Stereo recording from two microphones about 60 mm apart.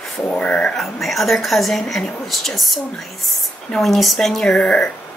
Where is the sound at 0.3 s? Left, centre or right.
Centre.